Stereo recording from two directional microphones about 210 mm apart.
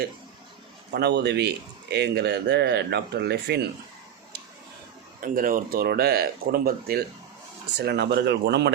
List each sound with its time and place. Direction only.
0.9 s speech: 55° right (ahead or behind)
5.2 s speech: 40° right (ahead or behind)